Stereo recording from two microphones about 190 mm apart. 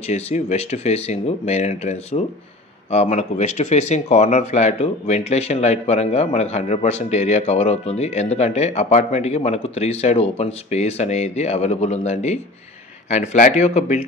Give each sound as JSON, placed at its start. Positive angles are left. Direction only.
{"t": 0.0, "sound": "speech", "side_deg": 35}